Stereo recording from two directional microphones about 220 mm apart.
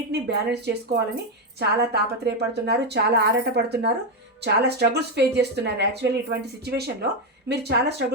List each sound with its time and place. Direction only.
0.1 s speech: 50° right (ahead or behind)